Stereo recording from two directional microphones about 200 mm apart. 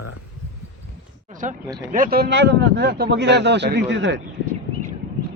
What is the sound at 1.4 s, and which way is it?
Speech, 40° right (ahead or behind).